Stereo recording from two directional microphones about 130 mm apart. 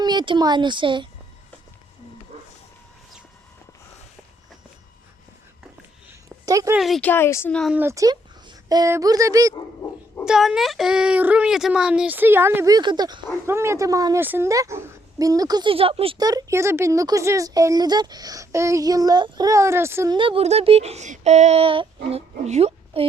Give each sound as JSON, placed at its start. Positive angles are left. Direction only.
{"t": 0.0, "sound": "speech", "side_deg": -35}
{"t": 6.1, "sound": "a sound", "side_deg": -25}
{"t": 6.7, "sound": "speech", "side_deg": 0}
{"t": 7.0, "sound": "speech", "side_deg": 15}
{"t": 7.7, "sound": "speech", "side_deg": -15}
{"t": 8.1, "sound": "a sound", "side_deg": -35}
{"t": 8.9, "sound": "speech", "side_deg": -25}
{"t": 10.2, "sound": "speech", "side_deg": -5}
{"t": 12.7, "sound": "speech", "side_deg": -35}
{"t": 13.4, "sound": "speech", "side_deg": -20}
{"t": 15.7, "sound": "speech", "side_deg": -45}
{"t": 16.1, "sound": "speech", "side_deg": -30}
{"t": 20.1, "sound": "speech", "side_deg": -40}
{"t": 22.4, "sound": "a woman's voice", "side_deg": -55}